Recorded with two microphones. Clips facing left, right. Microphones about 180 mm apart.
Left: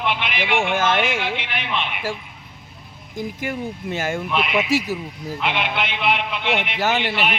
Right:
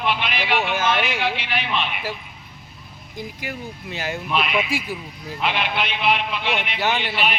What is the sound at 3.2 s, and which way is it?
Speech, 50° left (ahead or behind).